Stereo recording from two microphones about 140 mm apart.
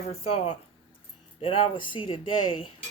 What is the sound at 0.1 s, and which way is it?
Speech, 45° left (ahead or behind).